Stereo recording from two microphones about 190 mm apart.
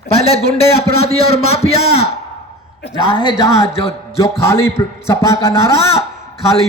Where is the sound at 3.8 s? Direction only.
30° left (ahead or behind).